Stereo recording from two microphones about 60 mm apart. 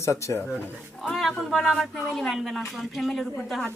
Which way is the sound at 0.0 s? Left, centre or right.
Left.